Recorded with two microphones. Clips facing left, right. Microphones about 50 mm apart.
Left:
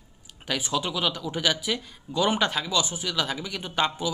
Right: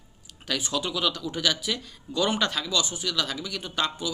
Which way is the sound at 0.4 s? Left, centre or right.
Centre.